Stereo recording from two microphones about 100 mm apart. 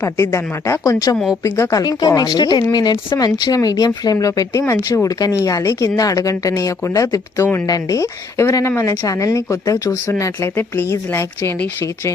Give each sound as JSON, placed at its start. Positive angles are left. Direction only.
{"t": 0.0, "sound": "speech", "side_deg": 30}